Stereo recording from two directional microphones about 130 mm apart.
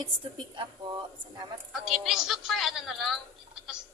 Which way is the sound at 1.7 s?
Centre (ahead or behind).